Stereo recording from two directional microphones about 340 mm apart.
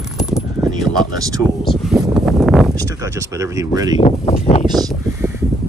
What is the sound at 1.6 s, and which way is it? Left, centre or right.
Speech, centre.